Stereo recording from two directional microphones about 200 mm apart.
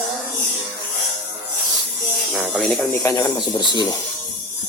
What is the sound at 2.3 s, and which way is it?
Speech, 5° left (ahead or behind).